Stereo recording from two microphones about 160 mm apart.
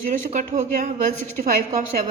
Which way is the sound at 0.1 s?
45° right (ahead or behind).